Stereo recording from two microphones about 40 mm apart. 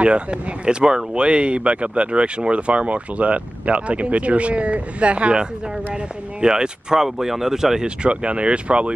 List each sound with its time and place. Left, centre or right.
0.0 s speech: right; by 7.8 s centre
7.8 s speech: right